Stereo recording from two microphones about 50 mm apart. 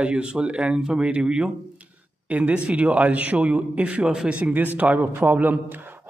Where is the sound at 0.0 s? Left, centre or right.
Right.